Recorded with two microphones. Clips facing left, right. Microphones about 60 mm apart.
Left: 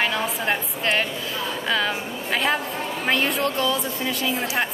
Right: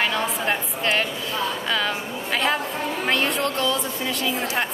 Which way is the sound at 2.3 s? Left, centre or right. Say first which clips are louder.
Even; centre.